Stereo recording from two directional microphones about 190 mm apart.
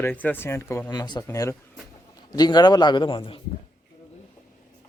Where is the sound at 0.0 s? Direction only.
10° left (ahead or behind); by 3.4 s 25° left (ahead or behind).